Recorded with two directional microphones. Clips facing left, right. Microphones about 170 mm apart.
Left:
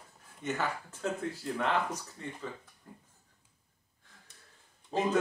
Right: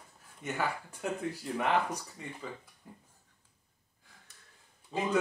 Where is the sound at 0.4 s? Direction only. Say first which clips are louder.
Left 3 dB; 10° right (ahead or behind).